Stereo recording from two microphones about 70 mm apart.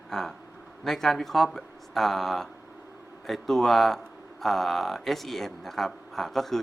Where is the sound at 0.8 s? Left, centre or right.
Centre.